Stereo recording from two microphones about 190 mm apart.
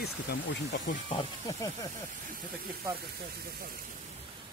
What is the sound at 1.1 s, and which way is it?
Speech, 20° left (ahead or behind).